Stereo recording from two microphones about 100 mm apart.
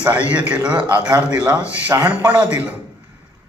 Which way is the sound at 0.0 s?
15° right (ahead or behind).